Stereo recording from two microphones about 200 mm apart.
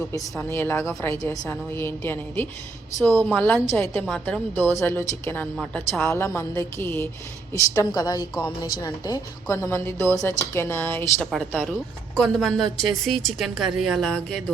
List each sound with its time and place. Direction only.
0.2 s a woman's voice: 10° left (ahead or behind)